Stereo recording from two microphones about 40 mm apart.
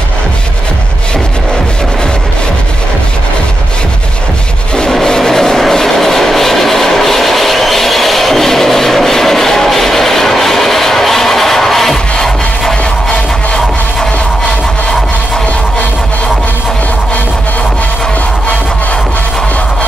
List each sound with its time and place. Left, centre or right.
5.0 s vehicle: centre